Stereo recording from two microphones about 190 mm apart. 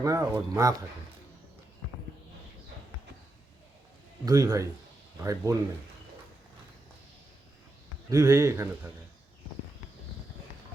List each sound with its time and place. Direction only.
0.0 s a man's voice: 15° right (ahead or behind)
4.3 s a man's voice: 20° right (ahead or behind)
8.1 s a man's voice: 15° right (ahead or behind)